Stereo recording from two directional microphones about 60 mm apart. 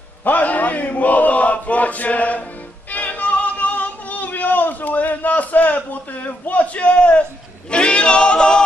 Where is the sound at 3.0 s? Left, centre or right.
Left.